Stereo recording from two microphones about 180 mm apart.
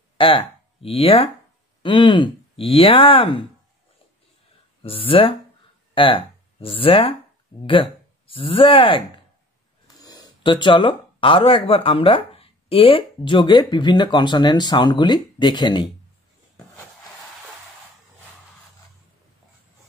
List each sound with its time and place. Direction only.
0.2 s speech: 30° left (ahead or behind)
4.8 s speech: 30° left (ahead or behind)
8.3 s speech: 30° left (ahead or behind)
10.0 s speech: 25° left (ahead or behind)